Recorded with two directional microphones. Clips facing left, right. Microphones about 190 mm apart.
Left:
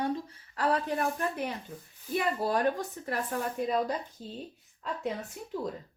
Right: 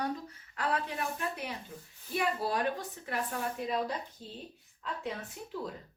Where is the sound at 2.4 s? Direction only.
45° left (ahead or behind).